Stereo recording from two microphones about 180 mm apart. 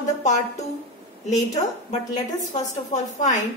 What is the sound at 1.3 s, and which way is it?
A woman's voice, 40° left (ahead or behind).